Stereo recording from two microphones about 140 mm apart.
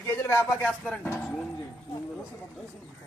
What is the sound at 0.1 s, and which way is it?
Speech, 15° left (ahead or behind).